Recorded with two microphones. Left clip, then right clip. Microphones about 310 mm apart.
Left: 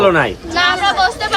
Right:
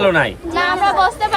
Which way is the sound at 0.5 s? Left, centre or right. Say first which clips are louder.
Left 1 dB; centre.